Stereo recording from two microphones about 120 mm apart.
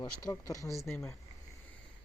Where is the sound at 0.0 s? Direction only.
30° left (ahead or behind).